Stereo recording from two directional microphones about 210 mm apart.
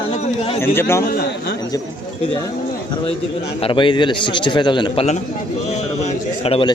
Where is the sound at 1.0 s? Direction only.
45° left (ahead or behind).